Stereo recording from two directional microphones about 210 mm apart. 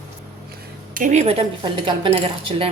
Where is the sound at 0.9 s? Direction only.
35° right (ahead or behind).